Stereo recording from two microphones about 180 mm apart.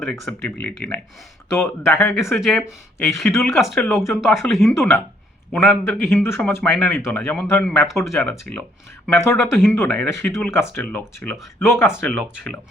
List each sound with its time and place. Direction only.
0.0 s speech: 5° left (ahead or behind)
2.4 s speech: centre (ahead or behind)
4.8 s speech: 15° left (ahead or behind)
7.2 s speech: centre (ahead or behind)
7.4 s speech: 15° left (ahead or behind)
8.0 s speech: centre (ahead or behind)